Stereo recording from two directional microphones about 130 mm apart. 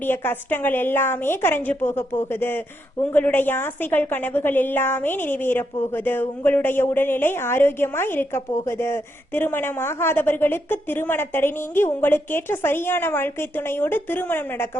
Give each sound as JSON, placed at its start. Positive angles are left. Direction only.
{"t": 0.0, "sound": "a woman's voice", "side_deg": 15}